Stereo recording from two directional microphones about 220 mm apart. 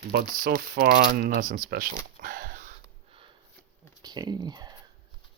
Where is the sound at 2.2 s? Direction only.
40° right (ahead or behind).